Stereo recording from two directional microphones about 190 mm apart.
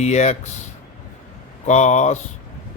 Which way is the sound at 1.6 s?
40° left (ahead or behind).